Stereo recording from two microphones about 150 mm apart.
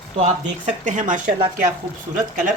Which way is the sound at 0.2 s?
55° right (ahead or behind).